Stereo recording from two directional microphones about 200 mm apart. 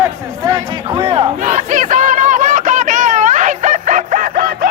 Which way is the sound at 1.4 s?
40° right (ahead or behind).